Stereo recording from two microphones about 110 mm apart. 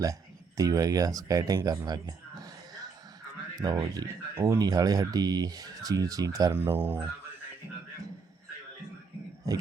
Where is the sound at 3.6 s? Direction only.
35° right (ahead or behind).